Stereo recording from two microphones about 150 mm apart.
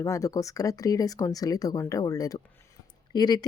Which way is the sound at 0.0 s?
20° left (ahead or behind).